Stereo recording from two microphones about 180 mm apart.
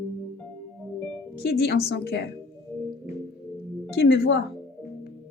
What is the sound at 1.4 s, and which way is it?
Speech, 60° left (ahead or behind).